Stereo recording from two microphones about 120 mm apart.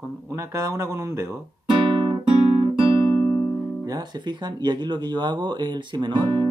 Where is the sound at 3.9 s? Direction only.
35° right (ahead or behind).